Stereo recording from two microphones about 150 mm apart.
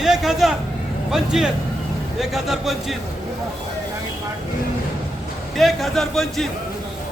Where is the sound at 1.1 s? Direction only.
5° right (ahead or behind).